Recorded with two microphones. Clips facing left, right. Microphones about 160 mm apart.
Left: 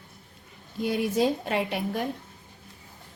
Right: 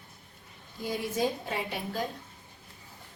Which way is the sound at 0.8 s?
75° left (ahead or behind).